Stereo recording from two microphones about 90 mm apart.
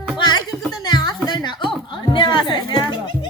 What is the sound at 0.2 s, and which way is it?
Music, 50° left (ahead or behind).